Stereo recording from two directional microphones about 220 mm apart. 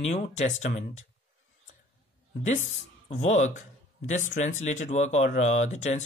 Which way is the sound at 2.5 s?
30° left (ahead or behind).